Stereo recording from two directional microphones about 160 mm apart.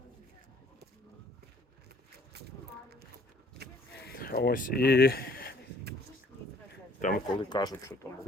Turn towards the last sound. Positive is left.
turn(degrees=25)  # may be behind; listen again after turning